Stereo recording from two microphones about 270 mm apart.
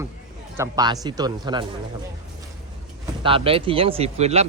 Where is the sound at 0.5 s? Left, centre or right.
Centre.